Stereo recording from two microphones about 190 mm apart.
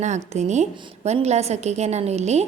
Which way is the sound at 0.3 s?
35° right (ahead or behind).